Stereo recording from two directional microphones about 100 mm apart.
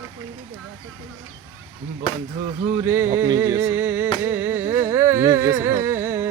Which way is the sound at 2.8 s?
25° right (ahead or behind).